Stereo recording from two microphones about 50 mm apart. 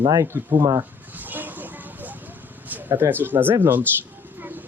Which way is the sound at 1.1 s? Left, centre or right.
Right.